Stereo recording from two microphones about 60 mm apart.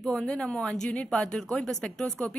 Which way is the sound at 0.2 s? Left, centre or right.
Centre.